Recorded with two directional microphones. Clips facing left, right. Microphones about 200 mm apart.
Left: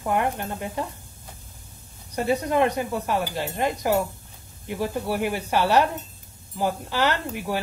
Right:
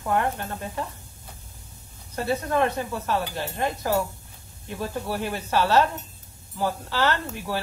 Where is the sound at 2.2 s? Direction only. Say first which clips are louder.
Left 2 dB; 15° left (ahead or behind).